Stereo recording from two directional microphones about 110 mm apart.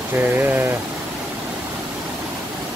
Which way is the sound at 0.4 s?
20° right (ahead or behind).